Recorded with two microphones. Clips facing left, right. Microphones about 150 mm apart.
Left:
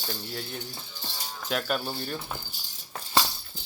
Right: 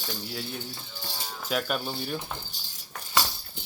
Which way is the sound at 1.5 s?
Centre (ahead or behind).